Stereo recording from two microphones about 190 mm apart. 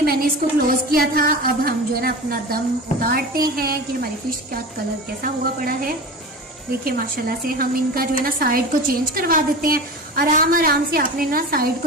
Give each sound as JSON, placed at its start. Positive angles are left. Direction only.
{"t": 0.0, "sound": "a sound", "side_deg": -55}
{"t": 0.9, "sound": "a woman's voice", "side_deg": -50}
{"t": 5.2, "sound": "a woman's voice", "side_deg": -50}